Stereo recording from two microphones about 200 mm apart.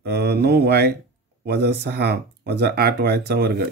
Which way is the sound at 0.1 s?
55° right (ahead or behind).